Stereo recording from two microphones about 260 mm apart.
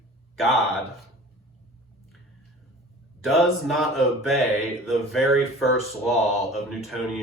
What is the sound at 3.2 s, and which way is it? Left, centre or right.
Speech, centre.